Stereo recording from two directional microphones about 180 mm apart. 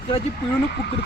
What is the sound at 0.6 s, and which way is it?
Speech, 70° left (ahead or behind).